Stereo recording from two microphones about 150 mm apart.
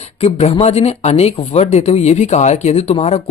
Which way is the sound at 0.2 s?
45° left (ahead or behind).